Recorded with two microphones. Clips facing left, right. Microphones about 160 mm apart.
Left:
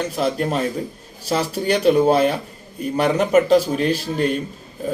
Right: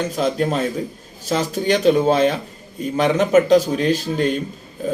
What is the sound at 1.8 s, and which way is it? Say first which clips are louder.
Speech: left 1 dB; 5° left (ahead or behind).